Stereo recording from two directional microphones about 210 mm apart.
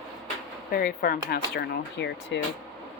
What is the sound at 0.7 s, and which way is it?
Speech, 45° left (ahead or behind).